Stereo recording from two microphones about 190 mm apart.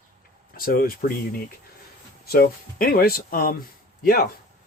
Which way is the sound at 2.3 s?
50° left (ahead or behind).